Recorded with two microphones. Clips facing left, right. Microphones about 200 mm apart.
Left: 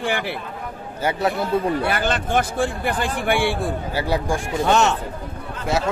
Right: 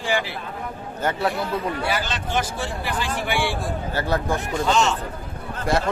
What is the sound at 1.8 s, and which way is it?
Speech, 55° left (ahead or behind).